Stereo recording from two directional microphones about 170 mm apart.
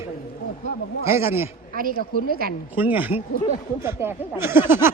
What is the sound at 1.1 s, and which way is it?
Speech, 15° right (ahead or behind).